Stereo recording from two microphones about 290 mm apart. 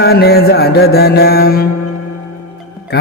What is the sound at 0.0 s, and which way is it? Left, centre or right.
Music, left.